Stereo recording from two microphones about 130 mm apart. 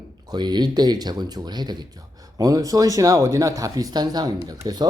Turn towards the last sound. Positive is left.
turn(degrees=-30)  # may be behind; listen again after turning